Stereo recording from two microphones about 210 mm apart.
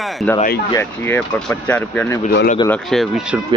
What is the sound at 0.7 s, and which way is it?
Speech, 10° left (ahead or behind).